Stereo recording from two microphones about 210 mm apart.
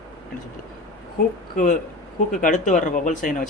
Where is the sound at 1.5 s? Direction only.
35° left (ahead or behind).